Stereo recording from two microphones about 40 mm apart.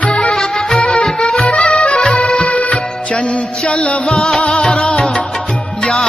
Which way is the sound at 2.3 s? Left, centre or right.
Left.